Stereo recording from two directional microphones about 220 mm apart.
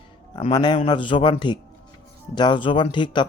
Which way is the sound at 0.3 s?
20° left (ahead or behind).